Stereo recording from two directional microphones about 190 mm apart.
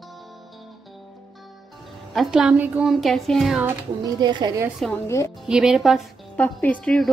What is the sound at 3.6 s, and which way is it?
A woman's voice, 20° right (ahead or behind).